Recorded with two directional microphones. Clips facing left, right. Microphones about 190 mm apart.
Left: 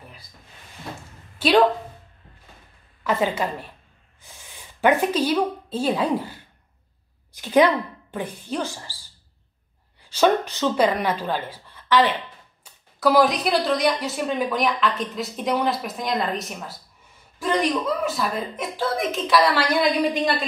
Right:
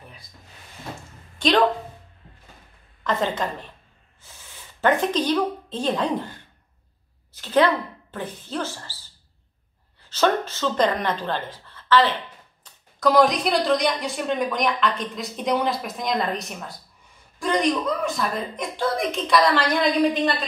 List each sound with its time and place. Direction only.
1.4 s speech: 5° left (ahead or behind)
3.0 s speech: 10° left (ahead or behind)
4.2 s a sound: 15° left (ahead or behind)
4.7 s speech: 10° left (ahead or behind)
10.0 s speech: 10° left (ahead or behind)
13.0 s a woman's voice: 5° left (ahead or behind)